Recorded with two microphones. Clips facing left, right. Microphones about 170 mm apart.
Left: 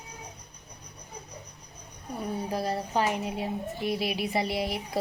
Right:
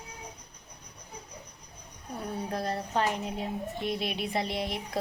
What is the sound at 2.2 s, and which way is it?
Speech, 5° left (ahead or behind).